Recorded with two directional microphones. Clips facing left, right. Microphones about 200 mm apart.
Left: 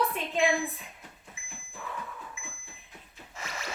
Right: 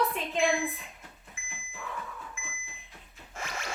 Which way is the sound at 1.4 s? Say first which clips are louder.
Right 3 dB; 50° right (ahead or behind).